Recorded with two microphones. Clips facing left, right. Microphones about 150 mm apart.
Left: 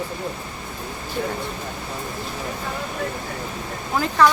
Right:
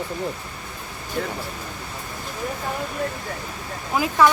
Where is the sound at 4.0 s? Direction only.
10° right (ahead or behind).